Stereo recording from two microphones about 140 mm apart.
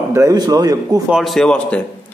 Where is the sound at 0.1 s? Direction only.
25° right (ahead or behind).